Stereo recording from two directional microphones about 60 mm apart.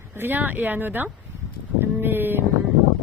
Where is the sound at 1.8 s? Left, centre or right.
Right.